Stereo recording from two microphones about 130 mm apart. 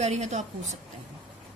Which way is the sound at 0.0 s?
60° right (ahead or behind).